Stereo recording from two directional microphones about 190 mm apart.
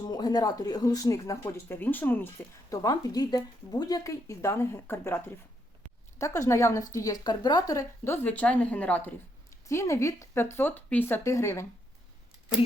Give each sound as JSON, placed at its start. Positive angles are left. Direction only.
{"t": 0.0, "sound": "speech", "side_deg": 20}